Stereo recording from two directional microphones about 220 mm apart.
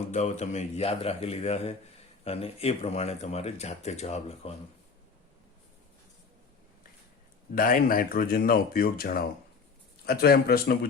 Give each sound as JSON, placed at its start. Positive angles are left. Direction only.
{"t": 0.1, "sound": "speech", "side_deg": 30}
{"t": 7.5, "sound": "speech", "side_deg": 40}